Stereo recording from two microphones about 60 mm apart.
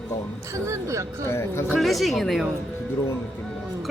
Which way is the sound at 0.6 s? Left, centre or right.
Right.